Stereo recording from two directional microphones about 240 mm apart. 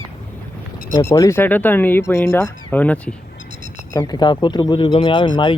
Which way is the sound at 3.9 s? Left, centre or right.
Centre.